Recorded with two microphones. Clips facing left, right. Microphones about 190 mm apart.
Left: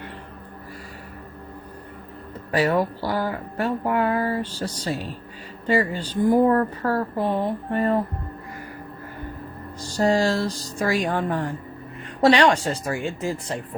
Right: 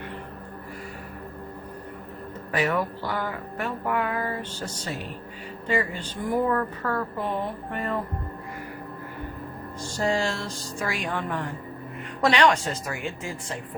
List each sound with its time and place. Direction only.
2.5 s speech: 35° left (ahead or behind)
10.0 s speech: 35° left (ahead or behind)